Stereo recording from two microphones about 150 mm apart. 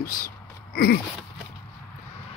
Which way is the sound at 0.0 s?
70° left (ahead or behind).